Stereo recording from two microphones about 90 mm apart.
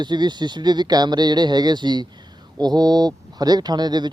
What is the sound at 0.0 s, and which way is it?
Speech, 55° right (ahead or behind).